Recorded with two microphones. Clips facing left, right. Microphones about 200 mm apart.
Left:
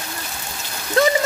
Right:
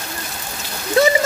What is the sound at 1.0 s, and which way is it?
Speech, 10° right (ahead or behind).